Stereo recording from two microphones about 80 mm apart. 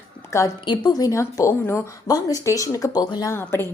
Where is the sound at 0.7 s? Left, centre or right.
Left.